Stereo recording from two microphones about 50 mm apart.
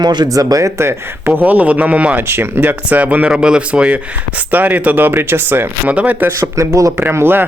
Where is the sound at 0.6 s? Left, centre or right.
Right.